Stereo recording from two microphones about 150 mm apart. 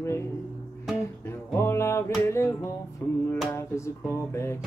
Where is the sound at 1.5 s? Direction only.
15° left (ahead or behind).